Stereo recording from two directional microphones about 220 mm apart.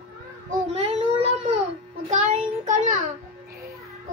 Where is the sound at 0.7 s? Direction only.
25° right (ahead or behind).